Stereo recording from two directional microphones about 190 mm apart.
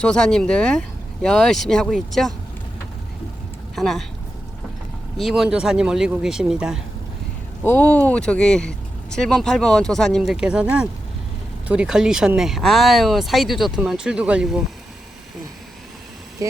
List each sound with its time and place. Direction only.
0.0 s speech: 5° left (ahead or behind)
3.8 s speech: centre (ahead or behind)
5.1 s speech: centre (ahead or behind)
7.6 s speech: 10° left (ahead or behind)
16.4 s speech: 20° right (ahead or behind)